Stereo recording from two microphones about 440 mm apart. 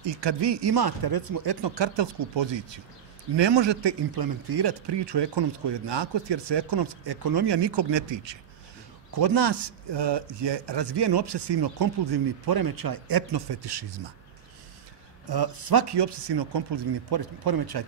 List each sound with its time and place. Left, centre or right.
0.0 s a man's voice: right
9.1 s a man's voice: right
15.2 s a man's voice: right